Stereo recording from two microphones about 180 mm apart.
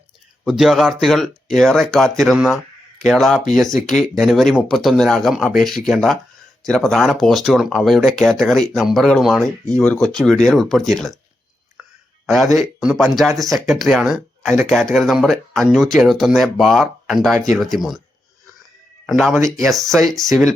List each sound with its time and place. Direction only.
0.4 s speech: centre (ahead or behind)
12.2 s speech: centre (ahead or behind)
12.5 s speech: 20° right (ahead or behind)
12.8 s speech: centre (ahead or behind)
19.0 s speech: centre (ahead or behind)
19.3 s speech: 15° right (ahead or behind)
19.5 s speech: centre (ahead or behind)